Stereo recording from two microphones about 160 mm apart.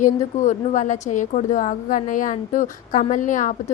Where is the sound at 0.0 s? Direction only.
50° left (ahead or behind).